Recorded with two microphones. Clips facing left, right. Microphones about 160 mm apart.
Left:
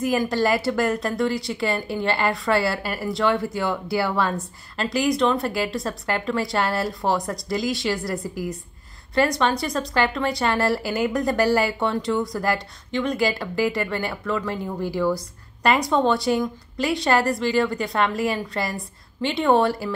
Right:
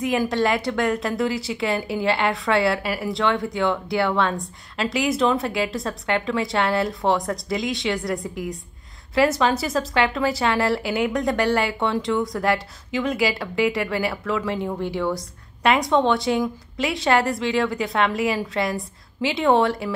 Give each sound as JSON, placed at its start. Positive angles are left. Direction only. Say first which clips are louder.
{"t": 0.0, "sound": "a woman's voice", "louder": "even", "side_deg": 0}